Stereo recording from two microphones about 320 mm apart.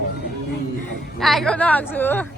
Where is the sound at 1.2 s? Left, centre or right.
Centre.